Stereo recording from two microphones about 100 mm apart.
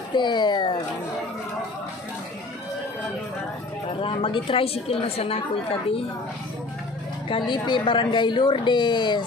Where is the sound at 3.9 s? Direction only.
65° left (ahead or behind).